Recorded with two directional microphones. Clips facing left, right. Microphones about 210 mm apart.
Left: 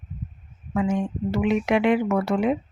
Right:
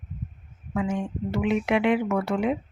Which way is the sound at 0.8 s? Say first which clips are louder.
Left 3 dB; 40° left (ahead or behind).